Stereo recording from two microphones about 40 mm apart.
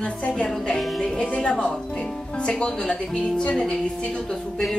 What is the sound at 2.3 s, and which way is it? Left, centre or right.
Speech, left.